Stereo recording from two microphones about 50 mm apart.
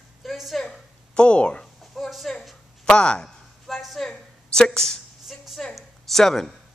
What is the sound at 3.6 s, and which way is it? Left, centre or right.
Speech, centre.